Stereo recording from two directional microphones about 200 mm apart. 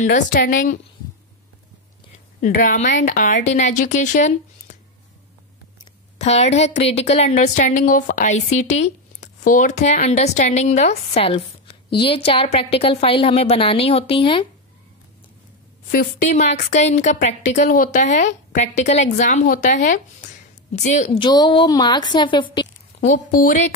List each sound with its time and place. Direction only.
0.0 s a woman's voice: 40° left (ahead or behind)
2.1 s a woman's voice: 40° left (ahead or behind)
6.1 s a woman's voice: 35° left (ahead or behind)
15.9 s a woman's voice: 45° left (ahead or behind)
21.2 s a woman's voice: 20° left (ahead or behind)
23.0 s a woman's voice: 40° left (ahead or behind)